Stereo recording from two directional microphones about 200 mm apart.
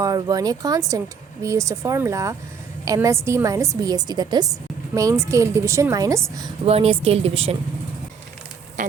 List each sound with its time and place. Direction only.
0.0 s speech: 15° right (ahead or behind)
6.7 s a woman's voice: 30° right (ahead or behind)
8.8 s a sound: 40° right (ahead or behind)